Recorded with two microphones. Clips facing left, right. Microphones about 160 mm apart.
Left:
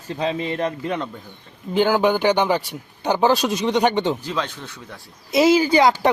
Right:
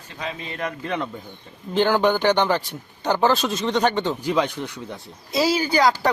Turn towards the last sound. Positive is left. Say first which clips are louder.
# left 3 dB
turn(degrees=25)  # may be behind; listen again after turning